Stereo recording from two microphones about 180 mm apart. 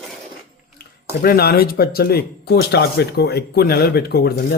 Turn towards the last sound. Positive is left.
turn(degrees=60)  # may be behind; listen again after turning